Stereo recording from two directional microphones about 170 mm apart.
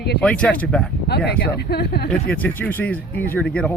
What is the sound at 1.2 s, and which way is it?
Speech, 70° left (ahead or behind).